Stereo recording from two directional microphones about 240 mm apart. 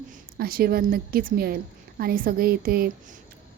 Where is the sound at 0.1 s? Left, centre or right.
Right.